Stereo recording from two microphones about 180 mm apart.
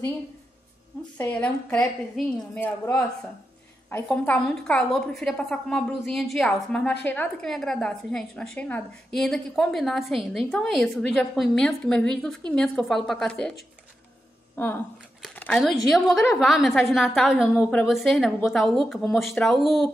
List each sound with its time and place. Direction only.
1.1 s a woman's voice: 10° left (ahead or behind)
14.5 s a woman's voice: 10° left (ahead or behind)